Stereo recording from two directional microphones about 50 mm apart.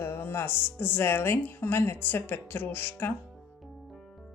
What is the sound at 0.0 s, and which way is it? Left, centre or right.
Speech, left.